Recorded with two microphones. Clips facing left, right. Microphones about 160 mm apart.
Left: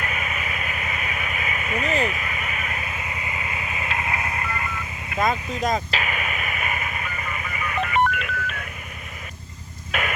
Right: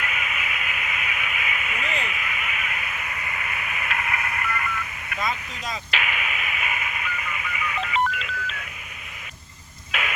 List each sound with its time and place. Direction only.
0.0 s vehicle: 40° left (ahead or behind)
5.2 s radio: 45° left (ahead or behind)
9.9 s radio: 45° left (ahead or behind)